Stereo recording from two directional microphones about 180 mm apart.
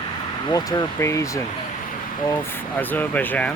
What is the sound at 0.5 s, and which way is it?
Speech, 20° left (ahead or behind).